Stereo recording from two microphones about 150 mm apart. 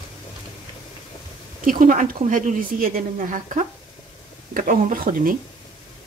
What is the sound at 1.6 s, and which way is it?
A woman's voice, 65° right (ahead or behind).